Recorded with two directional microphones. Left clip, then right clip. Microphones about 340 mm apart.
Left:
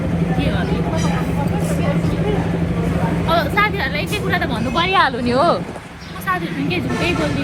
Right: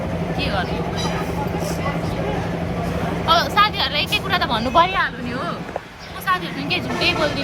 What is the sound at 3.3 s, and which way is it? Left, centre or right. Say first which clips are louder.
Speech: right 1 dB; centre.